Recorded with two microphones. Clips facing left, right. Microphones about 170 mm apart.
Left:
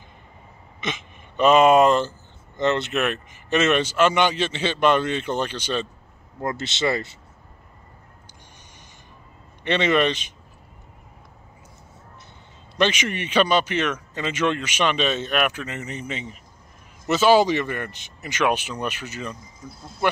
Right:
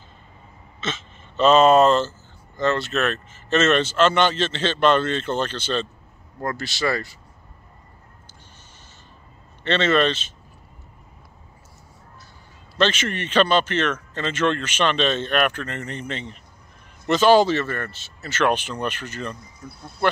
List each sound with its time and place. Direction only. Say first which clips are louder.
0.7 s speech: even; 15° left (ahead or behind)
9.7 s speech: right 1 dB; 15° left (ahead or behind)
12.7 s speech: even; 15° left (ahead or behind)